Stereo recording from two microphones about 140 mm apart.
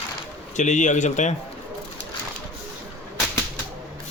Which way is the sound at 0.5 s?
60° left (ahead or behind).